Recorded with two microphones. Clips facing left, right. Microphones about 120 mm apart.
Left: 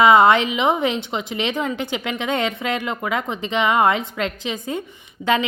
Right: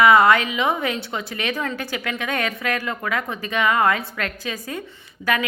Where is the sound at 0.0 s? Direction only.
25° left (ahead or behind).